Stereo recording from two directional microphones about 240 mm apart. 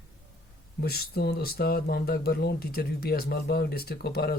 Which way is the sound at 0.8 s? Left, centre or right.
Left.